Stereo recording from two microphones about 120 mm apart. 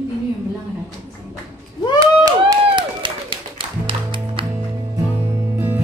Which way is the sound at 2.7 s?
45° right (ahead or behind).